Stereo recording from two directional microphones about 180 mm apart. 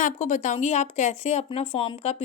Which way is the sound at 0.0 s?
40° left (ahead or behind).